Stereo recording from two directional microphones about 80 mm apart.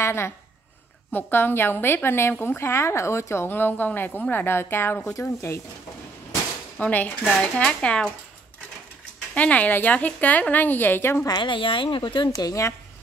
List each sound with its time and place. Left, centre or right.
0.0 s speech: left
6.8 s speech: left
9.3 s speech: centre
11.2 s speech: left
12.4 s speech: left